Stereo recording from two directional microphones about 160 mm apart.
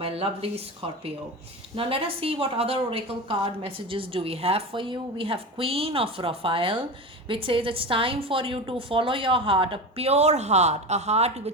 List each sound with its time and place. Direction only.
0.0 s speech: 35° right (ahead or behind)